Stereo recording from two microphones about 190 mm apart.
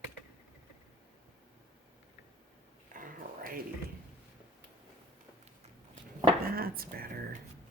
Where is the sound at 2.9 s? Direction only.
45° right (ahead or behind).